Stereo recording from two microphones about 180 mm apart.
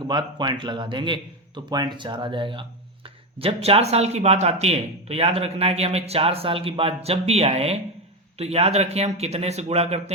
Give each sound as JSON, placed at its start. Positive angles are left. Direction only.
{"t": 0.0, "sound": "a man's voice", "side_deg": -25}